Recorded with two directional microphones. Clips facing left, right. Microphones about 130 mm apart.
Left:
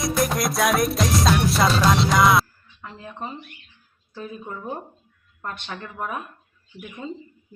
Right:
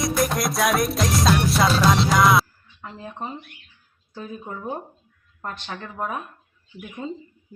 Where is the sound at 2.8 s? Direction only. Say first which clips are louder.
Right 1 dB; 30° right (ahead or behind).